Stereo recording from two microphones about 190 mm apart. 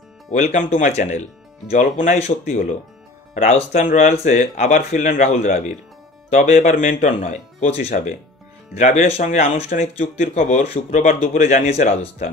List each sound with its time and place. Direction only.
0.3 s speech: 40° left (ahead or behind)